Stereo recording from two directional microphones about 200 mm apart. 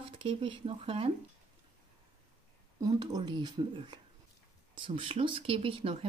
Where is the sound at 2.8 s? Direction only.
20° right (ahead or behind).